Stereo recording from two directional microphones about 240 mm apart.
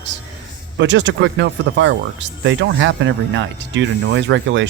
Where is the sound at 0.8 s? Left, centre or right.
Right.